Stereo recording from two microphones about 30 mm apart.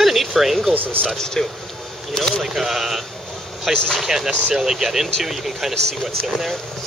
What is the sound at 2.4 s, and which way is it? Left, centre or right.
Speech, centre.